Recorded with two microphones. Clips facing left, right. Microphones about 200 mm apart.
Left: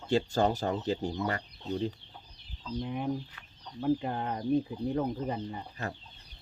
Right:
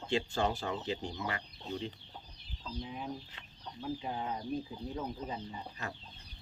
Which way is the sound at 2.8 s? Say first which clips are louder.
Left 9 dB; 60° left (ahead or behind).